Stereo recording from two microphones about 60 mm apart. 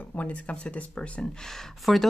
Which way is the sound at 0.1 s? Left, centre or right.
Left.